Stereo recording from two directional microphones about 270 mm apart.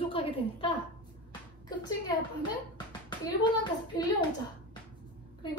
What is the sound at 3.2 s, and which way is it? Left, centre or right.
A woman's voice, centre.